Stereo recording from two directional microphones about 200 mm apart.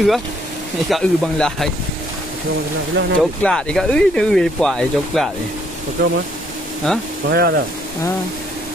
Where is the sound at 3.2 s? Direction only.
5° left (ahead or behind).